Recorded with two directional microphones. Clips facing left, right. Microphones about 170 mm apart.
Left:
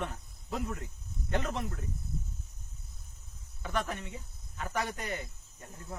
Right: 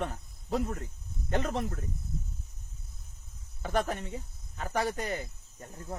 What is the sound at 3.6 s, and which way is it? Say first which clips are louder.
Speech: right 4 dB; 40° right (ahead or behind).